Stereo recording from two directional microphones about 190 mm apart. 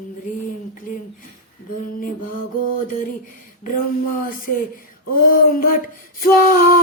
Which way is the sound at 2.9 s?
45° left (ahead or behind).